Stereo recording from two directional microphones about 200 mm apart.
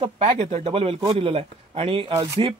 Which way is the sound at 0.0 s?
30° right (ahead or behind).